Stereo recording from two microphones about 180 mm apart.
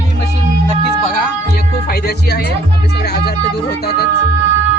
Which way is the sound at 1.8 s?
60° left (ahead or behind).